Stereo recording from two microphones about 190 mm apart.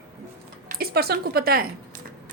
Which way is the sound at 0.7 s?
55° right (ahead or behind).